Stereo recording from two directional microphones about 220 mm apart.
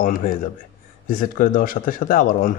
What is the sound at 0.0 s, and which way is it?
Speech, 40° left (ahead or behind).